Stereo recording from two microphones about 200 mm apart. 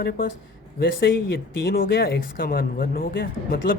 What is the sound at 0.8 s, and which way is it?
Speech, 50° left (ahead or behind).